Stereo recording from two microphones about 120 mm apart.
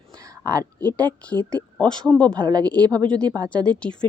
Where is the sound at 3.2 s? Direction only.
35° right (ahead or behind).